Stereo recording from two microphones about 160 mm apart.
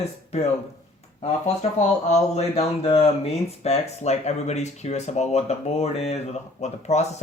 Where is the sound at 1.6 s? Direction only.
45° left (ahead or behind).